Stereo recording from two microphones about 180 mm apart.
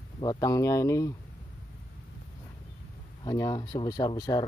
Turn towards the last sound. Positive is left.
turn(degrees=20)  # may be behind; listen again after turning